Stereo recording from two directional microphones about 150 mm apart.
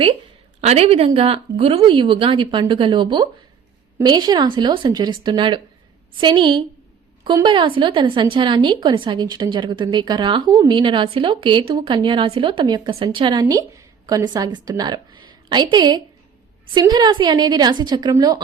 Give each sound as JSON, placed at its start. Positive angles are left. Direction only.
{"t": 0.6, "sound": "a woman's voice", "side_deg": -45}